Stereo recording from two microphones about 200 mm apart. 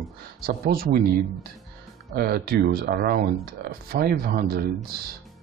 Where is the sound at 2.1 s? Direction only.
50° right (ahead or behind).